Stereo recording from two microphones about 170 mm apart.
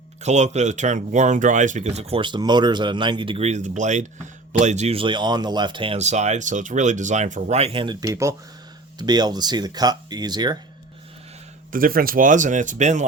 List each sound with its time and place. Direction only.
0.2 s speech: 45° right (ahead or behind); by 10.6 s 25° right (ahead or behind)
11.7 s speech: 55° right (ahead or behind)